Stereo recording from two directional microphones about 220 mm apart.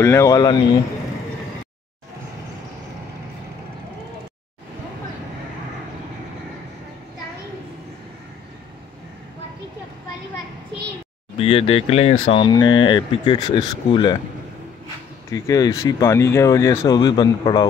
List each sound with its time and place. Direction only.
0.0 s speech: 15° left (ahead or behind)
11.3 s speech: 25° left (ahead or behind)
15.3 s speech: 15° left (ahead or behind)